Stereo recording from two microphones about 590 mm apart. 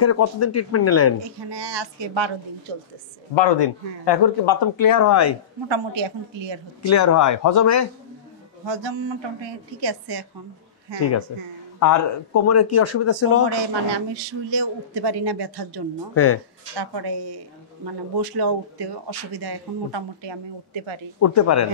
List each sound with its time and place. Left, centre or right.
0.0 s speech: left
1.4 s a woman's voice: right
3.3 s speech: left
5.7 s a woman's voice: right
6.8 s speech: left
8.6 s a woman's voice: right
11.0 s speech: left
13.9 s speech: right
21.2 s speech: left